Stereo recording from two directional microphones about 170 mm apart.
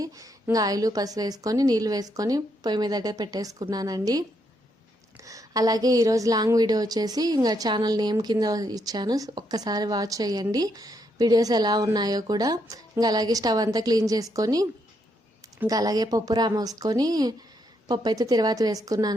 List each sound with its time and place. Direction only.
0.0 s a woman's voice: 20° right (ahead or behind)